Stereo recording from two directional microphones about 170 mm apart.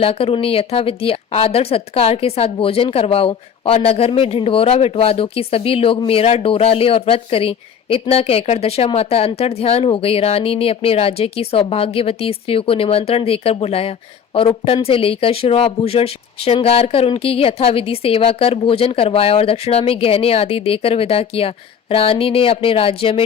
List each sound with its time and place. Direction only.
0.0 s speech: 35° left (ahead or behind)